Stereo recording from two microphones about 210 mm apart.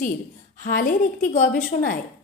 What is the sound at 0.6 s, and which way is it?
A woman's voice, 40° left (ahead or behind).